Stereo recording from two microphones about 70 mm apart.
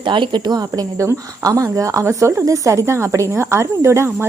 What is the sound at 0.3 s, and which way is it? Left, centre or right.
Speech, right.